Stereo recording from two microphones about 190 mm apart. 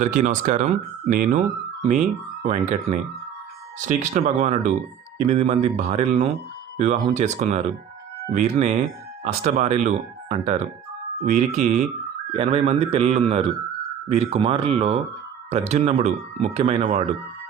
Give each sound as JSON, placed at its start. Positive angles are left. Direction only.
{"t": 0.0, "sound": "speech", "side_deg": -40}
{"t": 2.4, "sound": "speech", "side_deg": -35}